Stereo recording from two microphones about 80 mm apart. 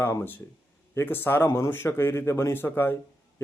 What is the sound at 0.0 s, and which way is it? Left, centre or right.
A man's voice, left.